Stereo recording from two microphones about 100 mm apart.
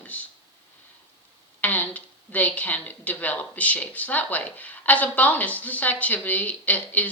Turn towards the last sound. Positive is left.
turn(degrees=15)  # may be behind; listen again after turning